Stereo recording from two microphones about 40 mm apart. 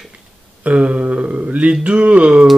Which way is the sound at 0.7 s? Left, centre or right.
Right.